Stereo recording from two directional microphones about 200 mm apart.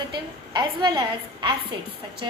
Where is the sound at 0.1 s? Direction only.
20° right (ahead or behind).